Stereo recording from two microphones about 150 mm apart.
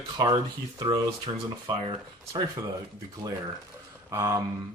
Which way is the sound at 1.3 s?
30° right (ahead or behind).